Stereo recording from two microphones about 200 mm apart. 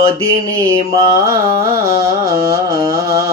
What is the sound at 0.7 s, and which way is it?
Mantra, 15° right (ahead or behind).